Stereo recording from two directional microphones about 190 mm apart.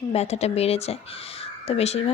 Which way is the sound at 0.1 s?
35° left (ahead or behind).